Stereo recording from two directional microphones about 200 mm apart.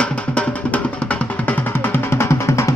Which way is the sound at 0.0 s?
5° left (ahead or behind).